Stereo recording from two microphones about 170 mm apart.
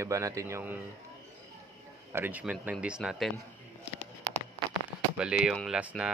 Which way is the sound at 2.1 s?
10° right (ahead or behind).